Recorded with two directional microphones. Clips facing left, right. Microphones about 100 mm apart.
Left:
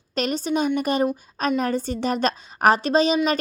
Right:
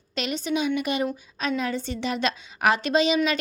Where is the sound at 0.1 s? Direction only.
40° left (ahead or behind).